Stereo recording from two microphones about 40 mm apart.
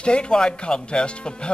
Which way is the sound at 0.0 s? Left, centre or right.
Left.